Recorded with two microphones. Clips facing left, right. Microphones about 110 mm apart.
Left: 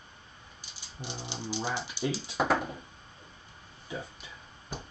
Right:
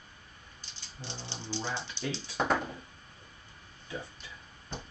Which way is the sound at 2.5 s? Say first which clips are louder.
Left 1 dB; 15° left (ahead or behind).